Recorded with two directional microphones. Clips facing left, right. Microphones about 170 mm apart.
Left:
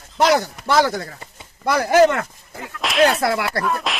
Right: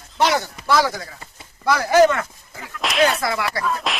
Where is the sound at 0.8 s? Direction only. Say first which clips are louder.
Left 3 dB; 55° left (ahead or behind).